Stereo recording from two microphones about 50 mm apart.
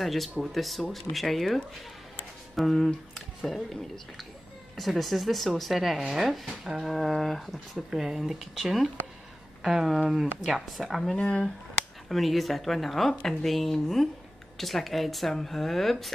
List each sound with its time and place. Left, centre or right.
0.0 s speech: centre
7.7 s speech: centre
11.1 s speech: centre
12.1 s speech: centre